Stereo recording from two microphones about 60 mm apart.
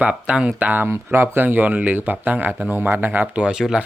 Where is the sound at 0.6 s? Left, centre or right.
Right.